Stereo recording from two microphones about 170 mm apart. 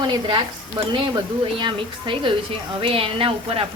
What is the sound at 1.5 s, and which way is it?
A woman's voice, 30° right (ahead or behind).